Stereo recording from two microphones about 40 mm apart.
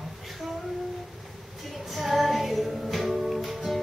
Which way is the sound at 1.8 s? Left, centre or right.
Centre.